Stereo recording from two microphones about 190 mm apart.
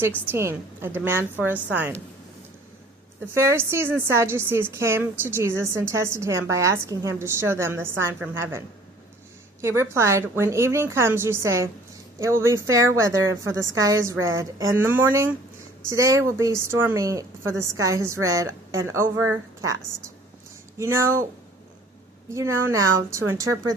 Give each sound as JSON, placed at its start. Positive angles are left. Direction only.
{"t": 0.3, "sound": "a woman's voice", "side_deg": -15}
{"t": 3.3, "sound": "a woman's voice", "side_deg": -15}
{"t": 20.7, "sound": "a woman's voice", "side_deg": -15}
{"t": 22.4, "sound": "a woman's voice", "side_deg": -15}